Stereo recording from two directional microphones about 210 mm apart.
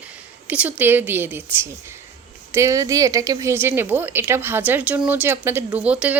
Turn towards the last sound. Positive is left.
turn(degrees=-5)  # may be behind; listen again after turning